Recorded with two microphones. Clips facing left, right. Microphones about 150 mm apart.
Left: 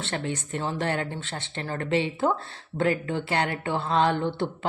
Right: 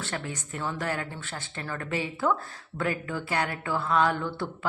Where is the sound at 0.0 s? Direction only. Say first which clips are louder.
Left 4 dB; 25° left (ahead or behind).